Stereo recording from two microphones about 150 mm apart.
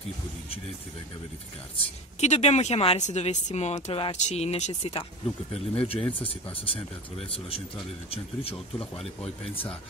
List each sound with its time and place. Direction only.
2.1 s speech: 50° left (ahead or behind)